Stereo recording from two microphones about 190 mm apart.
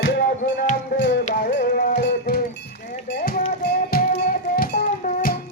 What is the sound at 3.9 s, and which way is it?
Music, 50° left (ahead or behind).